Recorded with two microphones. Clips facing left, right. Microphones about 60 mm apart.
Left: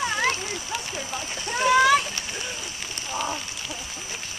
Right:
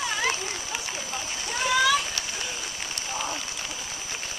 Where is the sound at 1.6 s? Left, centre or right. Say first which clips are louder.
Left 5 dB; left.